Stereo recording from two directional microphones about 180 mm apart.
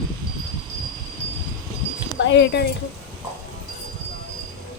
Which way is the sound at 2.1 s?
85° left.